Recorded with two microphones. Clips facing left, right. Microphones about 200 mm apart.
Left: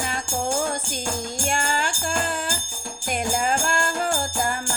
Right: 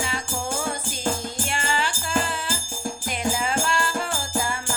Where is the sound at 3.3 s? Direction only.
45° left (ahead or behind).